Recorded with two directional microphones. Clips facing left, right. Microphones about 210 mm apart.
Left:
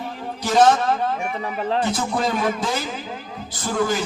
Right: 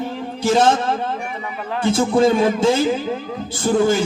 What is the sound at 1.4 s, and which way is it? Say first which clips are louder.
Speech: left 3 dB; 30° left (ahead or behind).